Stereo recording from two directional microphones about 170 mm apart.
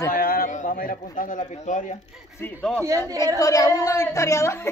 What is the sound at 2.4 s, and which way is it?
Speech, 5° left (ahead or behind).